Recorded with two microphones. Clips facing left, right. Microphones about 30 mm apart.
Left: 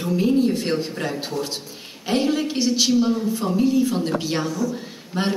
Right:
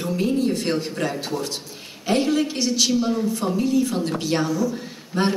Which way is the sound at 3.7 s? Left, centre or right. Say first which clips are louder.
Left 1 dB; left.